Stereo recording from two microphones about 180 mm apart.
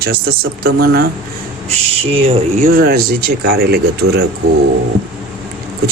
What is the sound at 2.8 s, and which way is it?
Speech, 55° right (ahead or behind).